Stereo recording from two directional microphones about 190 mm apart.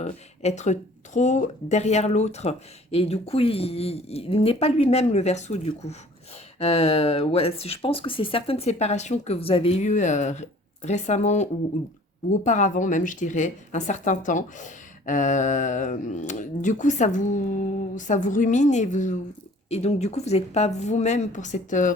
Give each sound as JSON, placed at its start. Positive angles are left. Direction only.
{"t": 0.0, "sound": "speech", "side_deg": 35}